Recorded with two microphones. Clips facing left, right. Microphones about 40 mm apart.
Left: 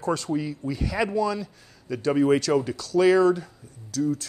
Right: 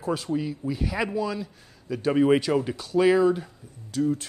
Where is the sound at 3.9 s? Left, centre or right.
Right.